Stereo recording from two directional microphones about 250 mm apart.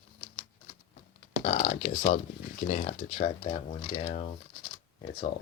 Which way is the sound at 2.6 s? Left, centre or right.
Left.